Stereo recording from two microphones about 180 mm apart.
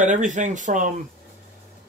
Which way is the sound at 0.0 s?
45° right (ahead or behind).